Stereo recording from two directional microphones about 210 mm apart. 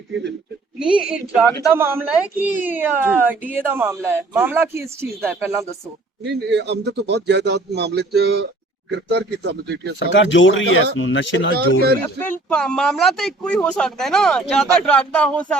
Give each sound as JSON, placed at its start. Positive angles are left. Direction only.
{"t": 0.8, "sound": "a woman's voice", "side_deg": -5}
{"t": 6.2, "sound": "speech", "side_deg": -55}
{"t": 10.1, "sound": "speech", "side_deg": 60}
{"t": 11.5, "sound": "speech", "side_deg": -50}
{"t": 12.5, "sound": "speech", "side_deg": 5}